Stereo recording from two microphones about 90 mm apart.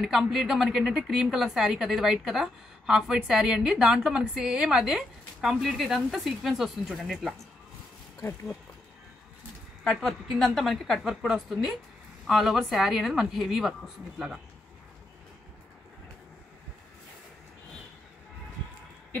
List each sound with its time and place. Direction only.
0.0 s a woman's voice: 5° right (ahead or behind)
8.2 s speech: 25° left (ahead or behind)
9.8 s a woman's voice: 5° left (ahead or behind)